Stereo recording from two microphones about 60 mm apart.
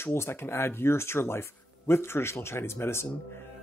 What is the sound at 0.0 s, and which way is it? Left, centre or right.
A man's voice, left.